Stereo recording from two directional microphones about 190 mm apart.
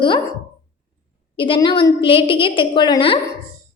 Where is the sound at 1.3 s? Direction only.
25° left (ahead or behind).